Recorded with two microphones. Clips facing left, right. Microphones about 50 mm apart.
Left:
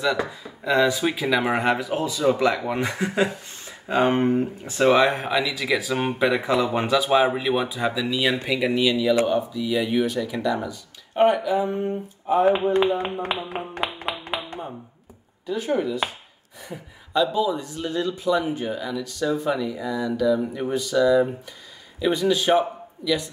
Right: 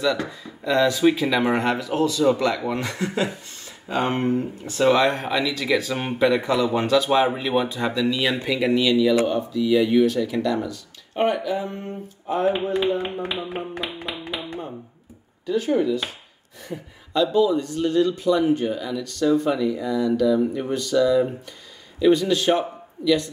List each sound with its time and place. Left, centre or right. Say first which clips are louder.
0.4 s speech: even; centre
4.7 s speech: even; centre
7.0 s speech: left 2 dB; centre
13.2 s speech: left 1 dB; left
13.7 s clapping: left 2 dB; left
15.4 s a man's voice: right 3 dB; centre